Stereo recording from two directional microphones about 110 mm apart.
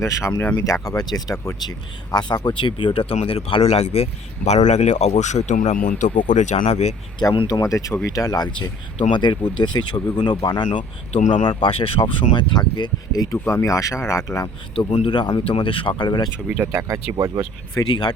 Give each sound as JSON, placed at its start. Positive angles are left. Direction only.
{"t": 0.0, "sound": "speech", "side_deg": 25}
{"t": 7.4, "sound": "speech", "side_deg": 30}
{"t": 9.0, "sound": "speech", "side_deg": 50}
{"t": 14.8, "sound": "speech", "side_deg": 60}
{"t": 16.5, "sound": "speech", "side_deg": -20}
{"t": 17.8, "sound": "speech", "side_deg": 45}